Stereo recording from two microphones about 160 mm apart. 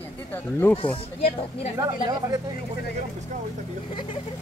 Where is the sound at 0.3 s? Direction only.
15° left (ahead or behind).